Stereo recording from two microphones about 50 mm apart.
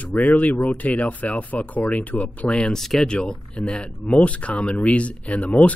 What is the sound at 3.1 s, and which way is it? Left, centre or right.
Speech, centre.